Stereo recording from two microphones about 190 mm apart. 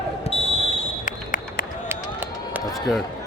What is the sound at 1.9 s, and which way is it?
Run, 10° right (ahead or behind).